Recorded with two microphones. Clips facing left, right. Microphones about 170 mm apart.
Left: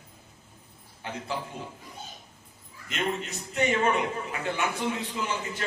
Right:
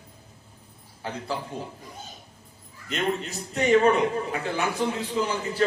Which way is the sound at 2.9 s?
35° right (ahead or behind).